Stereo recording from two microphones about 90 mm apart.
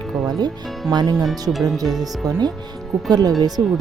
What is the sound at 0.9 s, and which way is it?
A woman's voice, 50° right (ahead or behind).